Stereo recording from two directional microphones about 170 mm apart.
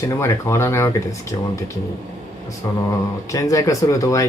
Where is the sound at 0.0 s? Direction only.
15° left (ahead or behind).